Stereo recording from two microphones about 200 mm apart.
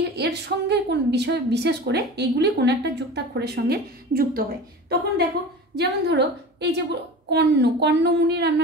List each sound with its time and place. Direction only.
0.1 s a woman's voice: 55° right (ahead or behind)